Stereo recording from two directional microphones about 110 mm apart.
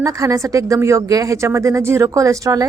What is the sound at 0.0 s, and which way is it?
Speech, 30° right (ahead or behind).